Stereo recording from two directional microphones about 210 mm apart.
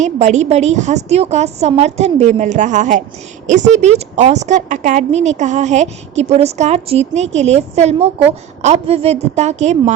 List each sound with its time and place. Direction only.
0.0 s a woman's voice: 35° right (ahead or behind)